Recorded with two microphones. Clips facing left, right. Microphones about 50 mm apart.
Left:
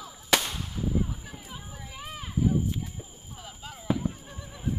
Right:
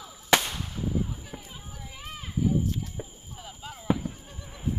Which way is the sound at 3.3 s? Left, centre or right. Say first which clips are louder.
Even; centre.